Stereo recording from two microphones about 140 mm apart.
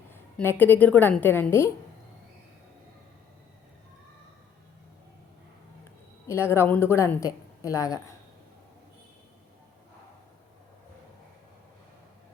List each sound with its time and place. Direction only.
0.1 s a woman's voice: 15° left (ahead or behind)
6.2 s a woman's voice: 20° left (ahead or behind)